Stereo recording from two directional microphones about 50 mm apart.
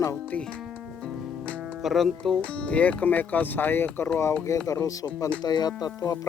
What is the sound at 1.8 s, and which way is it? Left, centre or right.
Speech, centre.